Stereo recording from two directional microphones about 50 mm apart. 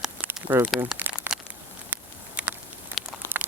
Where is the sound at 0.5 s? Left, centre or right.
Right.